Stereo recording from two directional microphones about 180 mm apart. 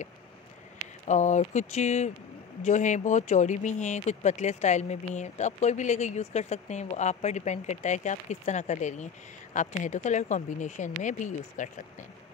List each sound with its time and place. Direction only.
1.0 s speech: 40° left (ahead or behind)